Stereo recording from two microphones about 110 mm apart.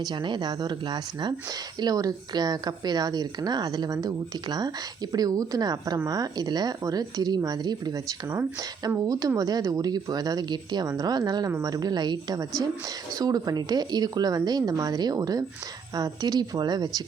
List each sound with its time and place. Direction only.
0.0 s speech: 45° right (ahead or behind)
9.0 s speech: 30° right (ahead or behind)